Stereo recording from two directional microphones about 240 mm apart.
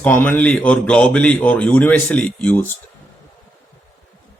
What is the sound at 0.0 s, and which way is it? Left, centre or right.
A man's voice, centre.